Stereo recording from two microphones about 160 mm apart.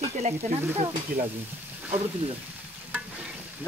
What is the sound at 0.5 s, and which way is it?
Stir, 15° right (ahead or behind).